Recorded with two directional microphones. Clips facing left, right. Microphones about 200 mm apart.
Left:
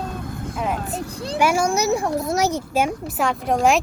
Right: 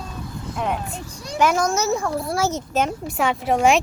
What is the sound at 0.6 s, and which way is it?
A woman's voice, centre (ahead or behind).